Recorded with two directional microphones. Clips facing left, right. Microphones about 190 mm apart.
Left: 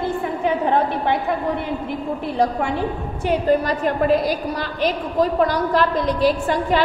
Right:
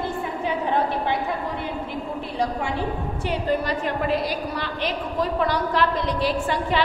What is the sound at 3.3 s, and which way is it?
A woman's voice, 45° left (ahead or behind).